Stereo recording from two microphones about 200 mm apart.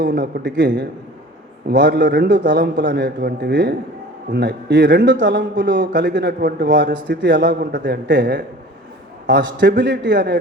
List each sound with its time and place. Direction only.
0.0 s a man's voice: 50° right (ahead or behind)